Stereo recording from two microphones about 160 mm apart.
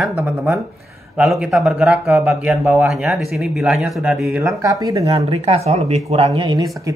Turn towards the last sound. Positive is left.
turn(degrees=-30)  # may be behind; listen again after turning